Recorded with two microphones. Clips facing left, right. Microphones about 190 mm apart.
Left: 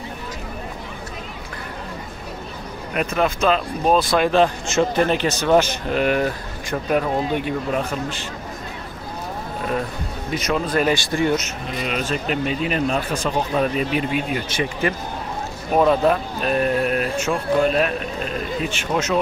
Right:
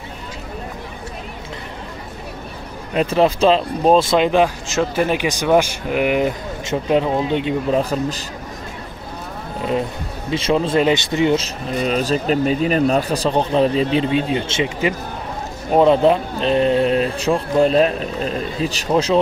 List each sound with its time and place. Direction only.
2.9 s speech: 30° right (ahead or behind)
4.6 s speech: 5° right (ahead or behind); by 7.8 s 20° right (ahead or behind)
7.8 s speech: 40° right (ahead or behind)
10.3 s speech: 25° right (ahead or behind)
11.4 s speech: 35° right (ahead or behind)